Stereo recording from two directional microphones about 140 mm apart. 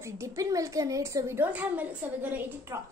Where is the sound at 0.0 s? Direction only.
20° right (ahead or behind).